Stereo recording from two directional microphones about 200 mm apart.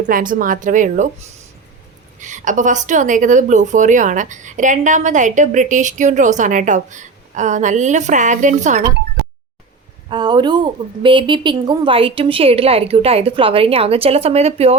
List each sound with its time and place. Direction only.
0.1 s a woman's voice: 45° right (ahead or behind)
2.1 s a woman's voice: 40° right (ahead or behind)
10.1 s a woman's voice: 20° right (ahead or behind)